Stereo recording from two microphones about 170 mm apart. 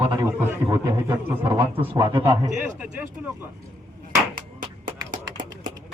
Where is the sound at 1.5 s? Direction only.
30° right (ahead or behind).